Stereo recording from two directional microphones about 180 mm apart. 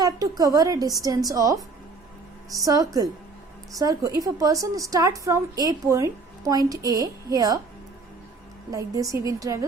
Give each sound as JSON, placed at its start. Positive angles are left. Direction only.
{"t": 0.0, "sound": "a woman's voice", "side_deg": -20}
{"t": 8.7, "sound": "a woman's voice", "side_deg": -20}